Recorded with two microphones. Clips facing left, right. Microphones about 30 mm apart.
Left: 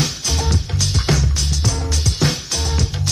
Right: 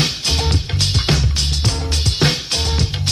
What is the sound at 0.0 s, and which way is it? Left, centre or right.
Music, right.